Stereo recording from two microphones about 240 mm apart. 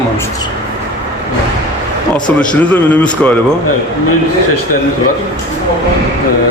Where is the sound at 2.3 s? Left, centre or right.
Centre.